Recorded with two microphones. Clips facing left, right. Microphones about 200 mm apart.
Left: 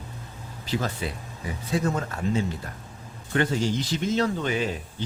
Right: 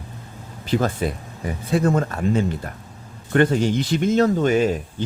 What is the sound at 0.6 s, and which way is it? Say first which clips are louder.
Speech: right 7 dB; 55° right (ahead or behind).